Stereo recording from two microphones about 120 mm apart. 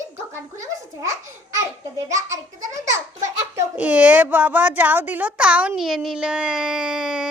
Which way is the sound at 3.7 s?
10° right (ahead or behind).